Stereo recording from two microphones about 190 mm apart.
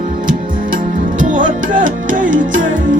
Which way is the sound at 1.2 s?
45° right (ahead or behind).